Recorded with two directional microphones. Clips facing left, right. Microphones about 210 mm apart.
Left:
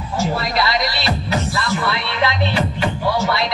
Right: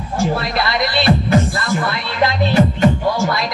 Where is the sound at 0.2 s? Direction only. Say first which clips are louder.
Right 1 dB; 55° right (ahead or behind).